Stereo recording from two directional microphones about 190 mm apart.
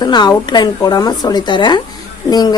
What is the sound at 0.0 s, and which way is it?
Speech, 20° left (ahead or behind).